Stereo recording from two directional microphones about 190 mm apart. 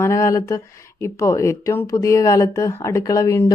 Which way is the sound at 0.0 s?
15° left (ahead or behind).